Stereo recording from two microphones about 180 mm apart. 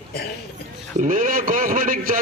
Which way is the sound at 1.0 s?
50° right (ahead or behind).